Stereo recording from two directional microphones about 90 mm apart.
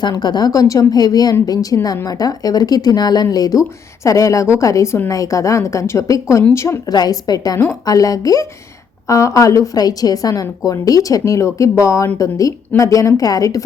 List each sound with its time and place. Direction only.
0.0 s speech: 55° left (ahead or behind); by 6.7 s 30° left (ahead or behind)
6.8 s speech: 45° left (ahead or behind)